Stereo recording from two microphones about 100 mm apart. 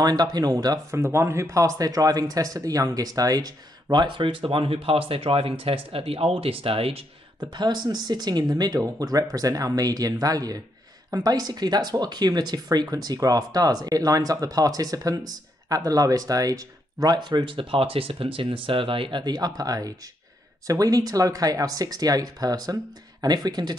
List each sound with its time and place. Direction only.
0.0 s speech: 45° right (ahead or behind)
0.9 s speech: 25° right (ahead or behind); by 7.1 s 70° right (ahead or behind)
7.3 s speech: 45° right (ahead or behind)